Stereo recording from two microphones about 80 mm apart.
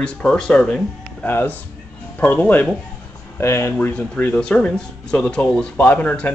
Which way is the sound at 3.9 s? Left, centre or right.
Left.